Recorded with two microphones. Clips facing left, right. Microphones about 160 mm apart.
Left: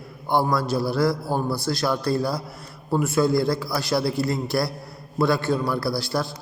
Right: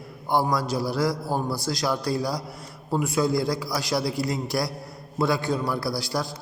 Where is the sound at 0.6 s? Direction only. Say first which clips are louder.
Left 3 dB; 60° left (ahead or behind).